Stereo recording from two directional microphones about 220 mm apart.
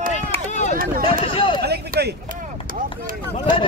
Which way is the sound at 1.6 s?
45° right (ahead or behind).